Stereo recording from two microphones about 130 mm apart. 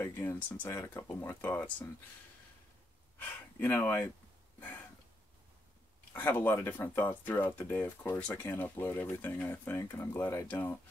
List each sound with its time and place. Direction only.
0.0 s speech: 20° left (ahead or behind)
3.2 s speech: 15° left (ahead or behind)
6.1 s speech: 15° left (ahead or behind)